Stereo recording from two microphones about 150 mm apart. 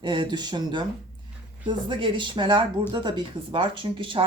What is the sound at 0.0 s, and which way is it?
Speech, 30° right (ahead or behind).